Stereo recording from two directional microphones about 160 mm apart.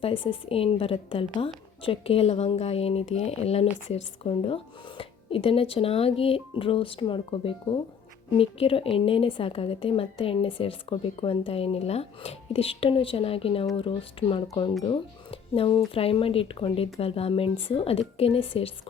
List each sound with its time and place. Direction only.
0.0 s a woman's voice: 35° left (ahead or behind)